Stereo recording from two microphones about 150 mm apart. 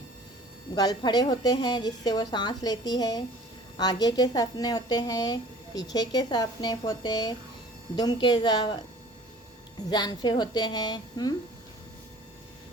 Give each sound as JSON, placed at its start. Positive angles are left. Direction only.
{"t": 0.8, "sound": "speech", "side_deg": 25}
{"t": 9.9, "sound": "speech", "side_deg": 30}